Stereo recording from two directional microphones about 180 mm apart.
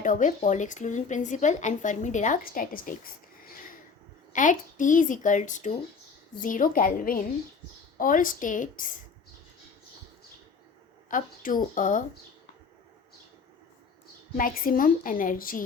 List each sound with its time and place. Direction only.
0.0 s speech: 45° left (ahead or behind)
11.1 s speech: 50° left (ahead or behind)
14.3 s speech: 50° left (ahead or behind)